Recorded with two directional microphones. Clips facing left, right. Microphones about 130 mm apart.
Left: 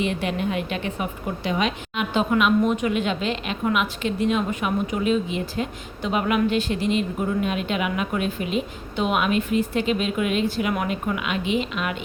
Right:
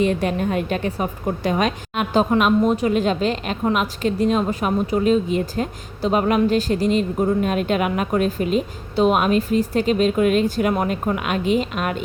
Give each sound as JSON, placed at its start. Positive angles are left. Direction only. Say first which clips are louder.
{"t": 0.0, "sound": "a woman's voice", "louder": "right 5 dB", "side_deg": -40}